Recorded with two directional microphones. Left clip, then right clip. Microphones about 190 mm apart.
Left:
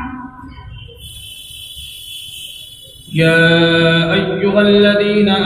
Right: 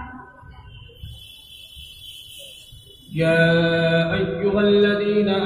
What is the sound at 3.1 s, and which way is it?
Mantra, 40° left (ahead or behind).